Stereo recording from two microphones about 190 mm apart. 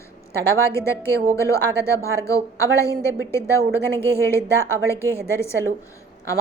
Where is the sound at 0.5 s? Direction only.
15° left (ahead or behind).